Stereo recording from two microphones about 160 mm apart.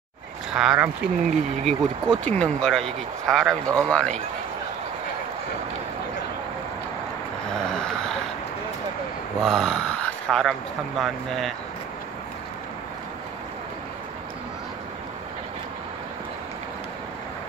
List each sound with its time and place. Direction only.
0.5 s speech: 5° right (ahead or behind)
1.7 s speech: 5° left (ahead or behind)
9.4 s speech: centre (ahead or behind)